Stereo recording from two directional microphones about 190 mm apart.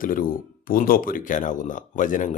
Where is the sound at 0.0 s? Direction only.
45° left (ahead or behind).